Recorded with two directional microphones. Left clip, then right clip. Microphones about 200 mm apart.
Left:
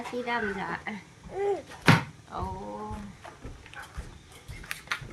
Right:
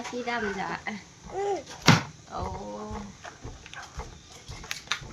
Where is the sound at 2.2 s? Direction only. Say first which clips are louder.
Right 1 dB; centre (ahead or behind).